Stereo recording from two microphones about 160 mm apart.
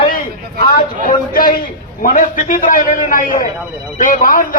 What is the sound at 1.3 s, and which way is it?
A man's voice, 60° left (ahead or behind).